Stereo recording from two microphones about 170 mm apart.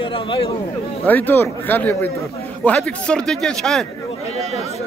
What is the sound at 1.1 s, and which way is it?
A man's voice, 10° left (ahead or behind).